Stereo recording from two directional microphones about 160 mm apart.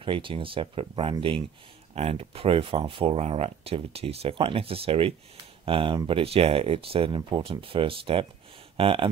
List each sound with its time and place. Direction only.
0.0 s speech: 30° right (ahead or behind)